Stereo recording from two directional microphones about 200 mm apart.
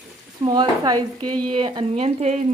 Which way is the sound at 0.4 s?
20° right (ahead or behind).